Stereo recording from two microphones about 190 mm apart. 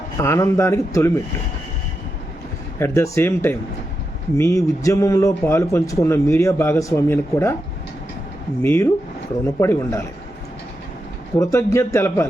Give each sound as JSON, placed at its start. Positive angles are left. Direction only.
{"t": 0.2, "sound": "a man's voice", "side_deg": 15}
{"t": 2.7, "sound": "a man's voice", "side_deg": 15}
{"t": 8.6, "sound": "a man's voice", "side_deg": 10}
{"t": 11.3, "sound": "a man's voice", "side_deg": 15}